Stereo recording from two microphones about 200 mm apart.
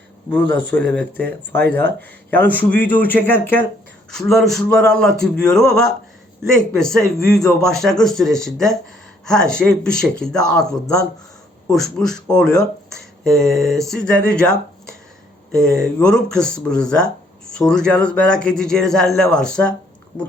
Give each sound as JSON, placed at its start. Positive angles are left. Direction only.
{"t": 0.4, "sound": "a man's voice", "side_deg": -60}
{"t": 0.9, "sound": "speech", "side_deg": 5}
{"t": 6.9, "sound": "speech", "side_deg": 0}